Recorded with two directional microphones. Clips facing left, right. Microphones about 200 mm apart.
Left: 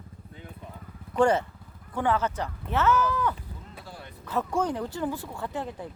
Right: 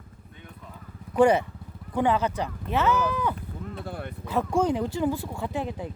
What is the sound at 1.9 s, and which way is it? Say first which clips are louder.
Speech: right 3 dB; 15° right (ahead or behind).